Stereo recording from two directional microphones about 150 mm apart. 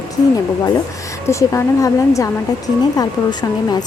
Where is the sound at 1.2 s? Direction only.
20° left (ahead or behind).